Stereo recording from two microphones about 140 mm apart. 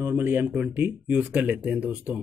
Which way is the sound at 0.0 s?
15° right (ahead or behind).